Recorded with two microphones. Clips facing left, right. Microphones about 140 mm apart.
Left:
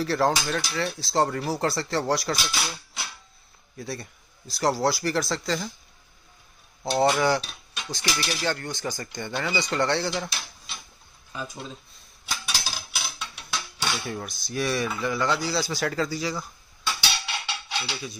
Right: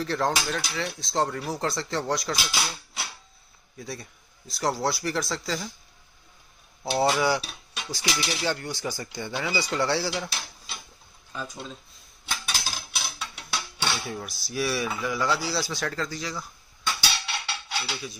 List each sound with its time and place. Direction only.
0.0 s speech: 5° left (ahead or behind)
6.9 s dishes: 5° right (ahead or behind)
8.3 s speech: 10° right (ahead or behind)
11.3 s speech: 5° left (ahead or behind)
12.4 s dishes: 10° left (ahead or behind)
17.7 s stir: 5° right (ahead or behind)